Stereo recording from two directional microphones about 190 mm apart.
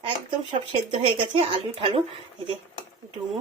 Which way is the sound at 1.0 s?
25° right (ahead or behind).